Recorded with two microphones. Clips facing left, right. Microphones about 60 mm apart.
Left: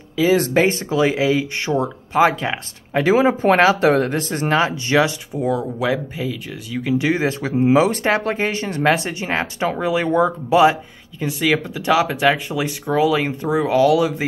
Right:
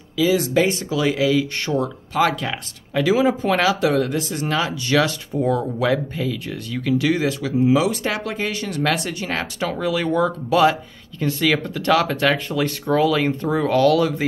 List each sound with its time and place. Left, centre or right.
0.2 s speech: left
5.3 s speech: centre